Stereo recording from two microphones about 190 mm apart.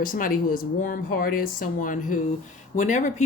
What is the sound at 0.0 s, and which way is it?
Speech, 50° left (ahead or behind).